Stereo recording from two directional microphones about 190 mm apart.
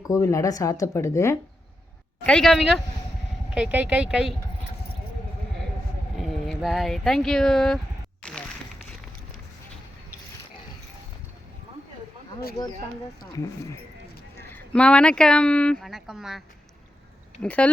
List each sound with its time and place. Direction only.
0.1 s speech: 15° left (ahead or behind)
2.2 s speech: 5° left (ahead or behind)
6.1 s speech: centre (ahead or behind)
8.2 s a sound: 5° left (ahead or behind)
13.3 s speech: 15° left (ahead or behind)
14.5 s speech: 5° left (ahead or behind)
17.4 s speech: 5° left (ahead or behind)